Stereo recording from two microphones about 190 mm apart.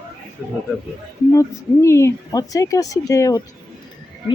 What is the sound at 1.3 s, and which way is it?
Speech, 15° left (ahead or behind).